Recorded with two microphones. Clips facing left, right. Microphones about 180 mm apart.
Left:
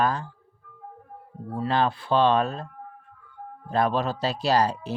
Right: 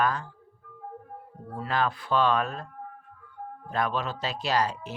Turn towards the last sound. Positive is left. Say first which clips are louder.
# left 5 dB
turn(degrees=35)  # may be behind; listen again after turning